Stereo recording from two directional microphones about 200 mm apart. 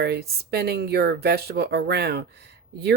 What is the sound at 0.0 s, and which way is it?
Speech, 55° right (ahead or behind).